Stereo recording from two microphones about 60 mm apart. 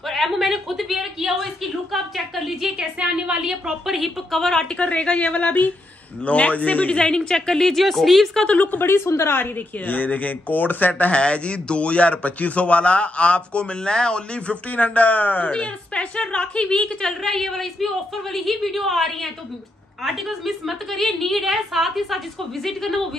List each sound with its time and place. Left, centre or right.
0.0 s a woman's voice: centre
2.8 s a woman's voice: centre
4.7 s speech: centre
8.5 s speech: left
8.8 s a woman's voice: left; by 23.0 s centre